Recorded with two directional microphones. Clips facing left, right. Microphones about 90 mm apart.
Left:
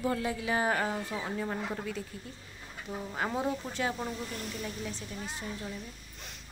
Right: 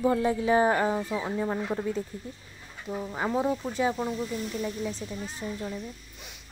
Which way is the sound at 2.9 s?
15° right (ahead or behind).